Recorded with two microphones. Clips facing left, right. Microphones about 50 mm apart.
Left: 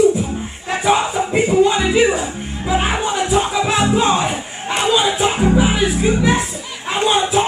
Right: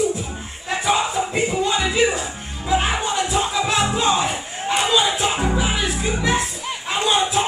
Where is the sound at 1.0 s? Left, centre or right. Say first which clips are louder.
Left 4 dB; centre.